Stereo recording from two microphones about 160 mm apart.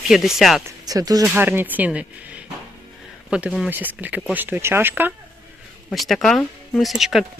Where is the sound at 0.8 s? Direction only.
25° right (ahead or behind).